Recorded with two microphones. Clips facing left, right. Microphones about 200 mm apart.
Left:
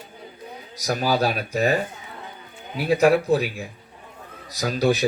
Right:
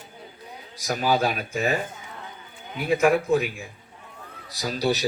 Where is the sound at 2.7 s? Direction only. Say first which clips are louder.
Left 3 dB; 35° left (ahead or behind).